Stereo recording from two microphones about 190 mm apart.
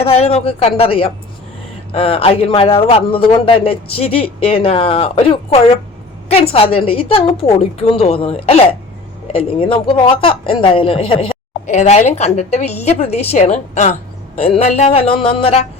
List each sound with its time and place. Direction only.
0.0 s a man's voice: 30° left (ahead or behind)